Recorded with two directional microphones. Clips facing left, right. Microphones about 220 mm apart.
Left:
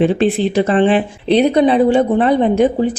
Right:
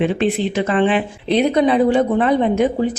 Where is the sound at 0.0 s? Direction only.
35° left (ahead or behind).